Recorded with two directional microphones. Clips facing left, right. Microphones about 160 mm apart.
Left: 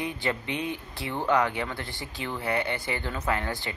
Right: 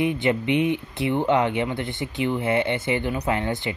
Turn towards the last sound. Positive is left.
turn(degrees=-20)  # may be behind; listen again after turning